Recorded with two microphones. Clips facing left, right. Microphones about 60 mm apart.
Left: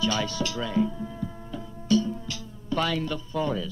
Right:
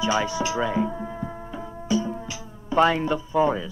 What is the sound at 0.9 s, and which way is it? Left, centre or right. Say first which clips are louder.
Tabla: right 3 dB; right.